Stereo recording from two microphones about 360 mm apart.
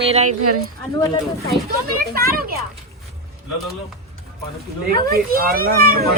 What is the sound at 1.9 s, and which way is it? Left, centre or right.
Speech, right.